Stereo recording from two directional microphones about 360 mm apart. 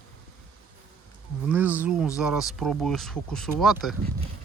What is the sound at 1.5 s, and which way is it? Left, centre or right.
Speech, centre.